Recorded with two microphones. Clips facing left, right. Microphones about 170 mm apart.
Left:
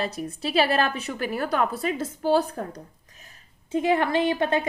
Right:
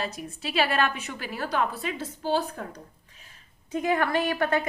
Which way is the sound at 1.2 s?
50° left (ahead or behind).